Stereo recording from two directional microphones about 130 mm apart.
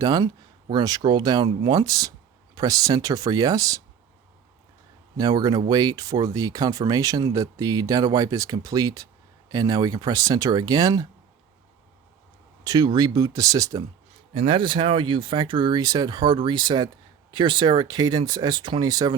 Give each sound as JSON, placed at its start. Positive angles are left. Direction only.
{"t": 0.0, "sound": "speech", "side_deg": -30}
{"t": 5.1, "sound": "speech", "side_deg": -30}
{"t": 12.6, "sound": "speech", "side_deg": -30}
{"t": 14.3, "sound": "speech", "side_deg": -45}